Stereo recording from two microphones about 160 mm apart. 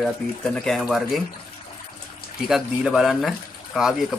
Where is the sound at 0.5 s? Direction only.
Centre (ahead or behind).